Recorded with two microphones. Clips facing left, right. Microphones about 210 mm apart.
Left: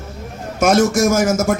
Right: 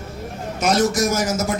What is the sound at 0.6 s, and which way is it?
Speech, 50° left (ahead or behind).